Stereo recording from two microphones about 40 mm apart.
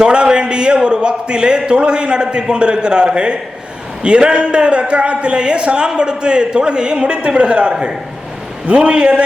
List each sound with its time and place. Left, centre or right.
0.0 s speech: right